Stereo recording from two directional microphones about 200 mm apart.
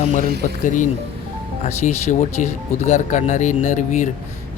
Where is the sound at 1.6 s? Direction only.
35° left (ahead or behind).